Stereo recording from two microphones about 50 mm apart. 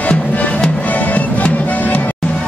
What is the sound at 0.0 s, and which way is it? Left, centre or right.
Music, left.